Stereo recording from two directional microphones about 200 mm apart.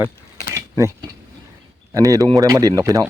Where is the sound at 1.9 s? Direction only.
15° right (ahead or behind).